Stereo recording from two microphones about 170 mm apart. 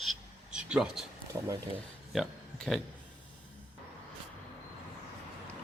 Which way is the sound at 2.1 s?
Centre (ahead or behind).